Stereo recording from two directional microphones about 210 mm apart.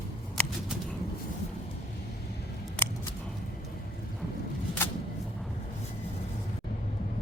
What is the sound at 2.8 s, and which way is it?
Scissors, 5° left (ahead or behind).